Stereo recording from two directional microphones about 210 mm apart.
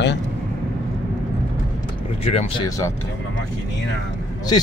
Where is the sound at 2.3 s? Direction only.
30° left (ahead or behind).